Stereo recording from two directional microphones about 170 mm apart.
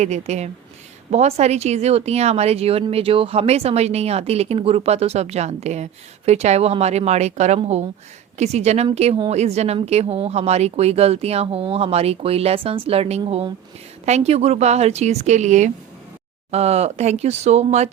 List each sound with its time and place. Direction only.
0.0 s speech: 40° right (ahead or behind)